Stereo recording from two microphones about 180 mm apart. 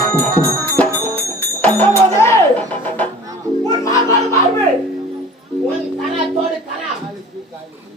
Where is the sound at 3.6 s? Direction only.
20° left (ahead or behind).